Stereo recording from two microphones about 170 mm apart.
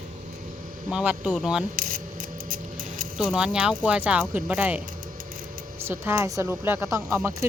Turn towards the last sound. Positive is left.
turn(degrees=-15)  # may be behind; listen again after turning